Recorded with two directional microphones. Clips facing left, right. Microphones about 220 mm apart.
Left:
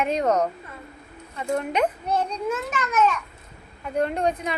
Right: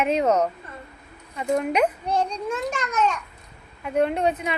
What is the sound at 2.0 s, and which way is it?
Speech, 5° left (ahead or behind).